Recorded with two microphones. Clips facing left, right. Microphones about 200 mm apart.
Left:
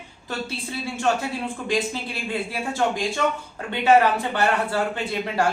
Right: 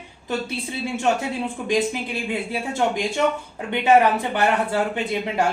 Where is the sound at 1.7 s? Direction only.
20° right (ahead or behind).